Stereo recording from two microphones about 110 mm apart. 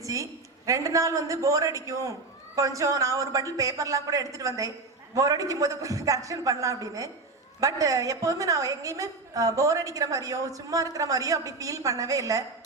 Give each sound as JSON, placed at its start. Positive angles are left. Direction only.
{"t": 0.0, "sound": "a man's voice", "side_deg": -30}